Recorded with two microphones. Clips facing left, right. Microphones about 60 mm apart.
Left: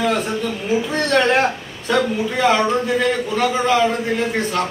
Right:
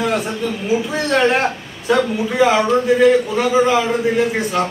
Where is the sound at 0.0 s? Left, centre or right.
Centre.